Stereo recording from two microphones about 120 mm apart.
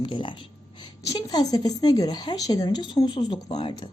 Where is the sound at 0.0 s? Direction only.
45° left (ahead or behind).